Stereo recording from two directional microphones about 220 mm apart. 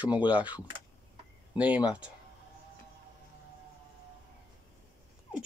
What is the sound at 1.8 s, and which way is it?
Speech, 5° right (ahead or behind).